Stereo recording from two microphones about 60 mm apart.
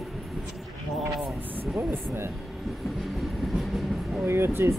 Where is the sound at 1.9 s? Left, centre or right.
Right.